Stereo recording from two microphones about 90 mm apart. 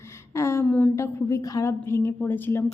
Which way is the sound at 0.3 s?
30° left (ahead or behind).